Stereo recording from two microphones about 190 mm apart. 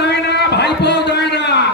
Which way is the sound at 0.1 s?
60° left (ahead or behind).